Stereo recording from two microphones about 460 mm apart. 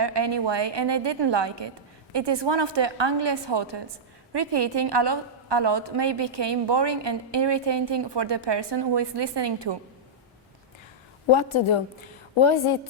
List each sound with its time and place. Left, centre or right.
0.0 s a woman's voice: right
11.3 s a woman's voice: left